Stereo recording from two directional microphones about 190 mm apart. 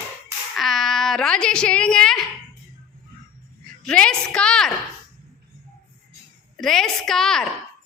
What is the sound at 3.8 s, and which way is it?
Speech, 5° left (ahead or behind).